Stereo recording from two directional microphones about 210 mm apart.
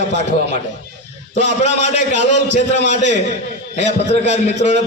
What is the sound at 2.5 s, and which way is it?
Speech, 60° right (ahead or behind).